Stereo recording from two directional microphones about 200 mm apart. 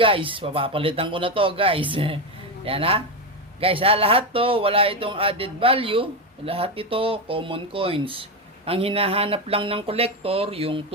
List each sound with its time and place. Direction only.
0.0 s speech: 25° right (ahead or behind)